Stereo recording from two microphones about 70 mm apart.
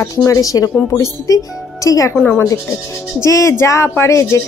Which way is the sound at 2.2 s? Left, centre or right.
Left.